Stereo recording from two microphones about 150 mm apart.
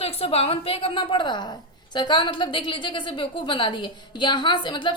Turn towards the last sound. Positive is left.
turn(degrees=30)  # may be behind; listen again after turning